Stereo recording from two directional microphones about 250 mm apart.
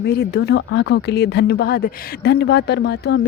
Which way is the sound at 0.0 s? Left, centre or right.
Left.